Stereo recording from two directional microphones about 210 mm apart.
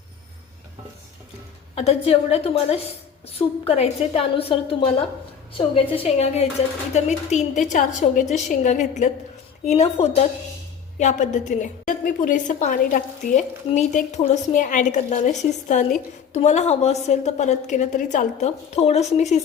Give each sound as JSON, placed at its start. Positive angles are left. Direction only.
{"t": 1.7, "sound": "a woman's voice", "side_deg": 30}